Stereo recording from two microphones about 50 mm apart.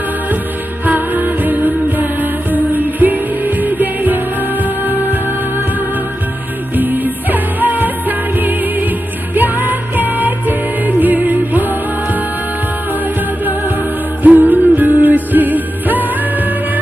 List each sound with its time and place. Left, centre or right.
0.8 s music: right
6.8 s music: right
14.2 s music: right